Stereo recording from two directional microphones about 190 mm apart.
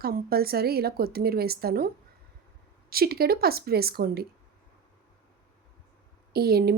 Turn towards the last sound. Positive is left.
turn(degrees=-55)  # may be behind; listen again after turning